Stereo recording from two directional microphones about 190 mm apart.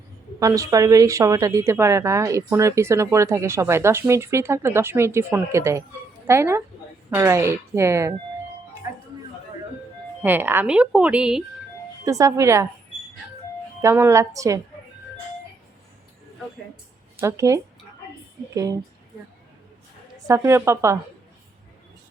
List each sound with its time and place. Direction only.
0.3 s a woman's voice: 15° right (ahead or behind)
10.2 s speech: 10° right (ahead or behind)
12.0 s a woman's voice: 15° right (ahead or behind)
13.8 s a woman's voice: 15° right (ahead or behind)
17.2 s a woman's voice: 15° right (ahead or behind)
20.1 s a woman's voice: 15° right (ahead or behind)